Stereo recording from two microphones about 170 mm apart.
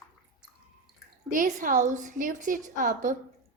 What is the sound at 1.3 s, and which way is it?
A woman's voice, 50° right (ahead or behind).